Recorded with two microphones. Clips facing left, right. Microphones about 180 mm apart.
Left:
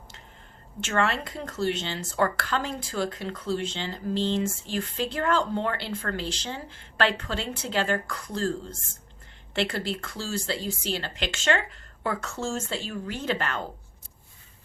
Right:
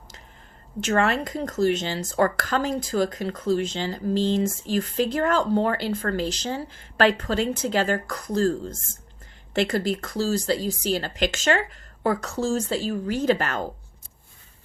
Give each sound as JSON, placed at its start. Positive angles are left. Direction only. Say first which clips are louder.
{"t": 0.8, "sound": "speech", "louder": "right 4 dB", "side_deg": -40}